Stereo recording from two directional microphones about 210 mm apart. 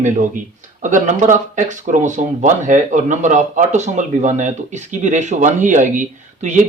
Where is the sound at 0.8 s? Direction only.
35° right (ahead or behind).